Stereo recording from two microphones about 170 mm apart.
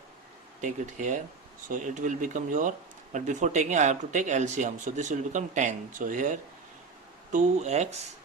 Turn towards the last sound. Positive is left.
turn(degrees=-40)  # may be behind; listen again after turning